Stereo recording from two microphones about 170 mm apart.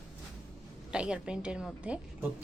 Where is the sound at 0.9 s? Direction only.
5° right (ahead or behind).